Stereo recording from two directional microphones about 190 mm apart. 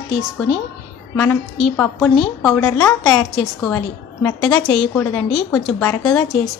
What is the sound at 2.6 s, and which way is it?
Speech, 15° left (ahead or behind).